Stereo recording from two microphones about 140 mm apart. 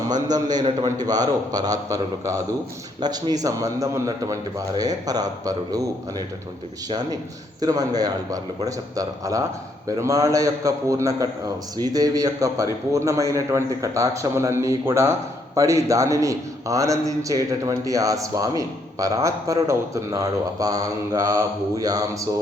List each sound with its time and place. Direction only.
0.3 s a man's voice: 30° right (ahead or behind)